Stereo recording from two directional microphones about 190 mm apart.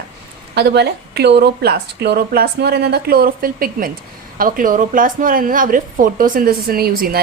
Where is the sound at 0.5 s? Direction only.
60° right (ahead or behind).